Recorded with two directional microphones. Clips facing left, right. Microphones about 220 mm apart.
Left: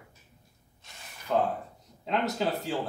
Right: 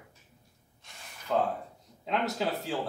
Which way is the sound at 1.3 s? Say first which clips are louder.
Left 1 dB; 5° left (ahead or behind).